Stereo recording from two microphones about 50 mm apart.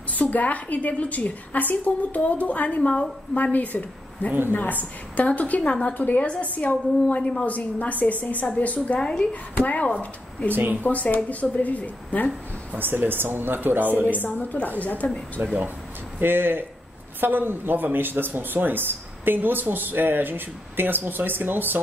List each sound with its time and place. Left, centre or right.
0.1 s a woman's voice: left
5.6 s a woman's voice: centre
5.9 s a woman's voice: left
9.0 s a woman's voice: centre
9.3 s a woman's voice: left
10.5 s speech: right
10.8 s a woman's voice: left
12.7 s speech: right
14.1 s a woman's voice: left
16.2 s speech: right